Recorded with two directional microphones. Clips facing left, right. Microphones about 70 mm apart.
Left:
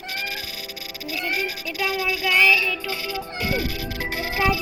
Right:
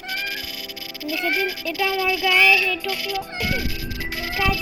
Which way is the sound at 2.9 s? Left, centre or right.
Left.